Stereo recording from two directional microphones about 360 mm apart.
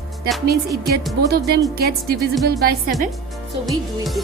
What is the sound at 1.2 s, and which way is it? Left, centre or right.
A woman's voice, right.